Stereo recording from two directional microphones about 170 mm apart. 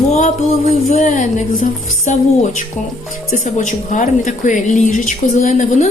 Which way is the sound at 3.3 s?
45° left (ahead or behind).